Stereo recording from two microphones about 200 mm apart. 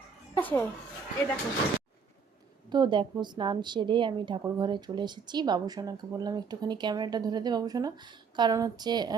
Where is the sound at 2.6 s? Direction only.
20° right (ahead or behind).